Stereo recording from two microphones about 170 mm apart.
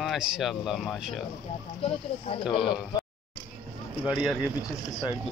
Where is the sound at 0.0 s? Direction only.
Centre (ahead or behind).